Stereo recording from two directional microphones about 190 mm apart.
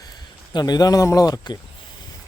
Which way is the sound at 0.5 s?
20° left (ahead or behind).